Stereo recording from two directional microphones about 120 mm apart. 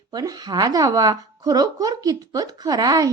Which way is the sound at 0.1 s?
35° right (ahead or behind).